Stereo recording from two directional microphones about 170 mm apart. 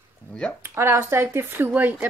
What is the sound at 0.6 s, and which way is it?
Speech, 15° right (ahead or behind).